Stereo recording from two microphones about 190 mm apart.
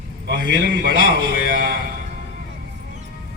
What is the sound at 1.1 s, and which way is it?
Speech, 55° right (ahead or behind).